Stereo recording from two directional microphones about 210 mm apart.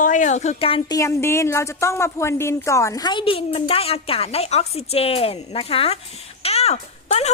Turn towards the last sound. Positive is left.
turn(degrees=30)  # may be behind; listen again after turning